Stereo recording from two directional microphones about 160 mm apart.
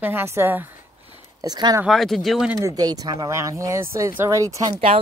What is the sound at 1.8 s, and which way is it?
Speech, centre (ahead or behind).